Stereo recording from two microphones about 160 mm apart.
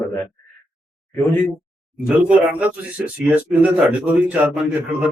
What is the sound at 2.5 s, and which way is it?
A man's voice, 10° right (ahead or behind).